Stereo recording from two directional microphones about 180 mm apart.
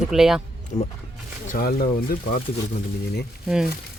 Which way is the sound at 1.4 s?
50° left (ahead or behind).